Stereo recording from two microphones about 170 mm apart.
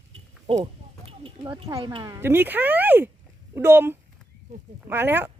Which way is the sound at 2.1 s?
15° right (ahead or behind).